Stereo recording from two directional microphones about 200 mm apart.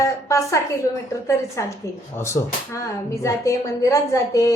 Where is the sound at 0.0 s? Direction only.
15° left (ahead or behind).